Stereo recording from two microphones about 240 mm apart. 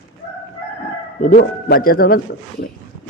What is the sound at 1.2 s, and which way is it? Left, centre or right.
Speech, left.